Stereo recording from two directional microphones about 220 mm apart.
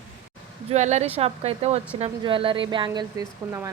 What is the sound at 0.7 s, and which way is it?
A woman's voice, 30° right (ahead or behind).